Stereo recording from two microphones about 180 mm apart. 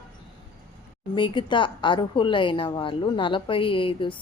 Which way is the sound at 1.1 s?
25° left (ahead or behind).